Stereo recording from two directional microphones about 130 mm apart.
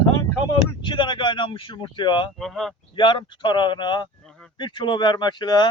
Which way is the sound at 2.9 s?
40° left (ahead or behind).